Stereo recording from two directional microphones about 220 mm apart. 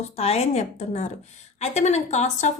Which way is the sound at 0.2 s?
30° left (ahead or behind).